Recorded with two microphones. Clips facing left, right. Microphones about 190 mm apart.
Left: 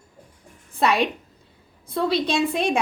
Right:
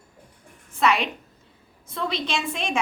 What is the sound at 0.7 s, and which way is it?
Speech, 35° left (ahead or behind).